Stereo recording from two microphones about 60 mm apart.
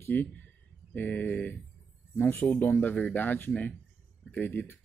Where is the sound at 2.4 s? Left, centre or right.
Left.